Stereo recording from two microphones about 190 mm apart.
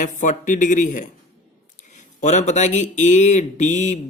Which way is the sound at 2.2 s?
40° left (ahead or behind).